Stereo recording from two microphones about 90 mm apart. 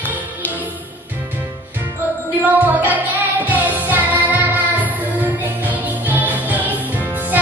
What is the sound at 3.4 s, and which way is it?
Music, 20° right (ahead or behind).